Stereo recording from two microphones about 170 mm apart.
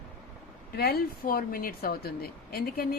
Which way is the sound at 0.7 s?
65° left (ahead or behind).